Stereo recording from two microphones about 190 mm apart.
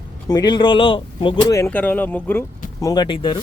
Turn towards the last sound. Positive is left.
turn(degrees=25)  # may be behind; listen again after turning